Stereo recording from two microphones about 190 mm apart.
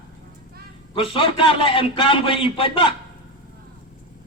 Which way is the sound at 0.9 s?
25° left (ahead or behind).